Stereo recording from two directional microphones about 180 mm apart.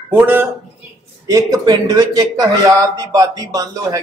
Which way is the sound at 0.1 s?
10° right (ahead or behind).